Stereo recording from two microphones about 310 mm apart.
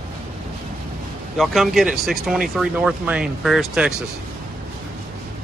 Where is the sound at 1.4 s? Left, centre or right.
Centre.